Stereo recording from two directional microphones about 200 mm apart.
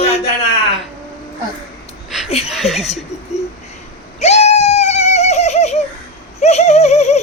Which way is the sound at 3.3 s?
35° left (ahead or behind).